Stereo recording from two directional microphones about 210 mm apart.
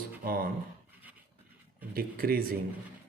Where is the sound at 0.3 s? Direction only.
45° right (ahead or behind).